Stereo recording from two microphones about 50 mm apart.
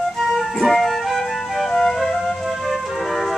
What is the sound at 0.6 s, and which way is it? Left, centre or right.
Music, centre.